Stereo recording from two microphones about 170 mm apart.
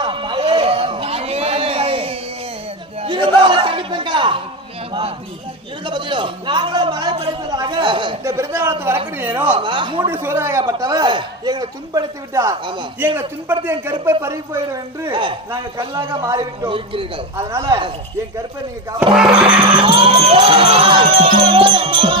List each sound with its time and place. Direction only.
0.0 s a sound: 30° right (ahead or behind)
8.2 s a sound: 15° right (ahead or behind)
9.6 s a sound: 30° right (ahead or behind)
10.1 s a man's voice: 15° right (ahead or behind)
13.1 s speech: 15° right (ahead or behind)
15.1 s a man's voice: 30° right (ahead or behind)
16.6 s music: 30° right (ahead or behind)
17.3 s a man's voice: 15° right (ahead or behind)
19.1 s speech: 5° right (ahead or behind)
19.8 s music: 30° right (ahead or behind)
21.3 s speech: 30° right (ahead or behind)